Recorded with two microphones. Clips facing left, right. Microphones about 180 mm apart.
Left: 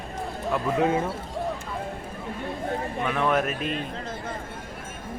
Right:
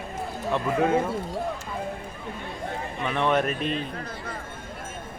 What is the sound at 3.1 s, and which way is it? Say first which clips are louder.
Speech: right 1 dB; 5° left (ahead or behind).